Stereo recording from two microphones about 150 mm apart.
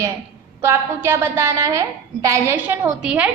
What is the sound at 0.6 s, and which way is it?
A woman's voice, 15° right (ahead or behind).